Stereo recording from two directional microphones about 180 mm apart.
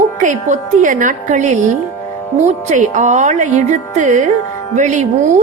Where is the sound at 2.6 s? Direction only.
45° right (ahead or behind).